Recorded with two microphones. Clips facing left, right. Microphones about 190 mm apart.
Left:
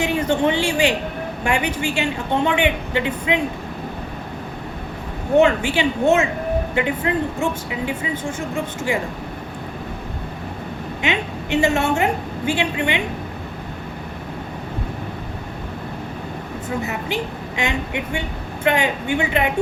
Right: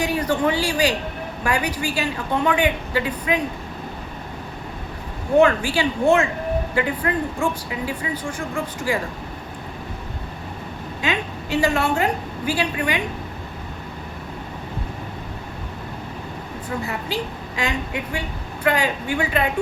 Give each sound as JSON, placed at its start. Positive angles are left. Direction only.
{"t": 0.0, "sound": "speech", "side_deg": 25}
{"t": 5.3, "sound": "speech", "side_deg": 25}
{"t": 11.0, "sound": "speech", "side_deg": 25}
{"t": 16.6, "sound": "speech", "side_deg": 20}